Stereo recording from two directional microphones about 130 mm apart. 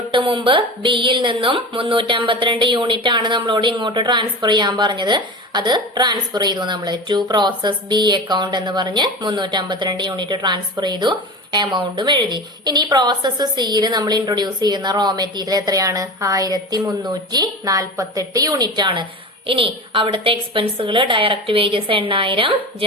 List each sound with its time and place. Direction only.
0.1 s a woman's voice: 40° right (ahead or behind)